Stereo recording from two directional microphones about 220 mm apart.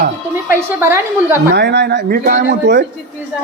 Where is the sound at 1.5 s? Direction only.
50° right (ahead or behind).